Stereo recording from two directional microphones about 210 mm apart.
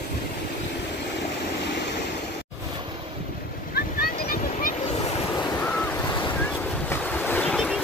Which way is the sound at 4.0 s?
45° left (ahead or behind).